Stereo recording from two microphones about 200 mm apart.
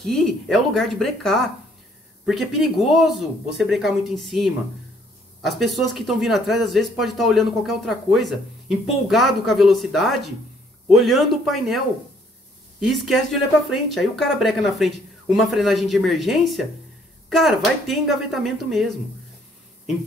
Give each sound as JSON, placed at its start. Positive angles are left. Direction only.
{"t": 0.0, "sound": "speech", "side_deg": 0}
{"t": 12.8, "sound": "speech", "side_deg": 0}